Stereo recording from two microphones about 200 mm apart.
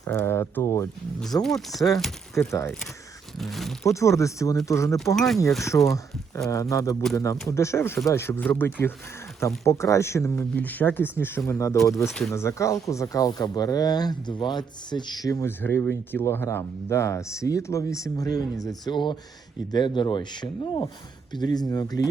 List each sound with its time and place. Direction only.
0.0 s speech: 10° left (ahead or behind)
1.4 s speech: centre (ahead or behind)
2.3 s speech: 15° left (ahead or behind)
3.3 s speech: centre (ahead or behind)
3.8 s speech: 15° left (ahead or behind)
5.1 s speech: centre (ahead or behind)
5.6 s speech: 15° left (ahead or behind)
12.0 s speech: 5° left (ahead or behind)